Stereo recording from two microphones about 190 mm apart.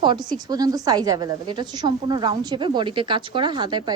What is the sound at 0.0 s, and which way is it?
A woman's voice, 20° right (ahead or behind).